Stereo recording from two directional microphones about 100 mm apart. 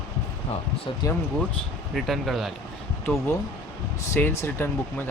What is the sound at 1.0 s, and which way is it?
Speech, 35° left (ahead or behind).